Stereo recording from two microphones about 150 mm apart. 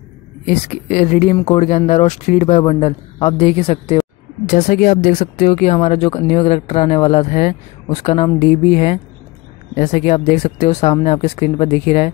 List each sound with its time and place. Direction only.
0.5 s speech: 50° left (ahead or behind)
2.6 s a woman's voice: 35° left (ahead or behind)
4.5 s speech: 65° left (ahead or behind); by 12.1 s 45° left (ahead or behind)